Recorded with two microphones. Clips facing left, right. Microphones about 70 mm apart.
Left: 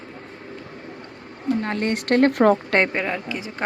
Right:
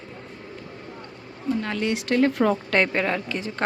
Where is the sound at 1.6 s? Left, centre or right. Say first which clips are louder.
Left 2 dB; left.